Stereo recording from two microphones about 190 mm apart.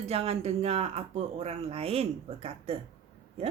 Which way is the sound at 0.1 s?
30° right (ahead or behind).